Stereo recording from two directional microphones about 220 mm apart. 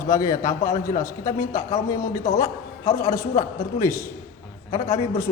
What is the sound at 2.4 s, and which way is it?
A man's voice, 15° left (ahead or behind).